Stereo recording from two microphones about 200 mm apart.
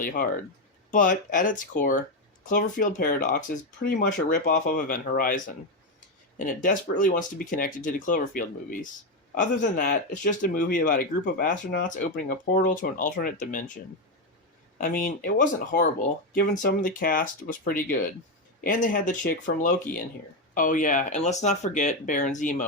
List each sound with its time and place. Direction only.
0.0 s speech: 45° left (ahead or behind)
6.4 s speech: 45° left (ahead or behind)
14.8 s speech: 45° left (ahead or behind)